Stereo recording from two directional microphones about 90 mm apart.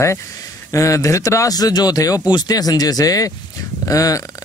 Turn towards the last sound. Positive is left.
turn(degrees=40)  # may be behind; listen again after turning